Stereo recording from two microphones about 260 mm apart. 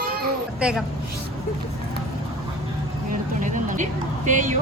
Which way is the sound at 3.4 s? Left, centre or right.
Right.